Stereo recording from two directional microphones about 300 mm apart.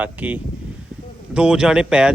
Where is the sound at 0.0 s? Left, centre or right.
Centre.